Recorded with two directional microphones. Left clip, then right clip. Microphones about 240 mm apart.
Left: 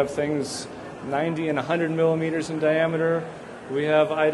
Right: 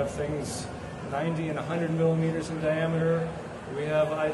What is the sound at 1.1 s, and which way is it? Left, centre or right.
A man's voice, left.